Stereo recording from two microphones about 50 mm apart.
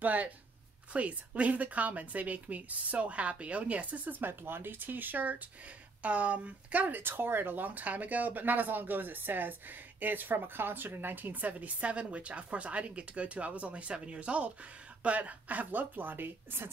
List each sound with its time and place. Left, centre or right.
0.0 s speech: right